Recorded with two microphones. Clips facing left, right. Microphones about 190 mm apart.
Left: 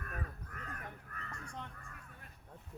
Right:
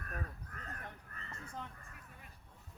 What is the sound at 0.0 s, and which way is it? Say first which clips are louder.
Crow: even; 35° right (ahead or behind).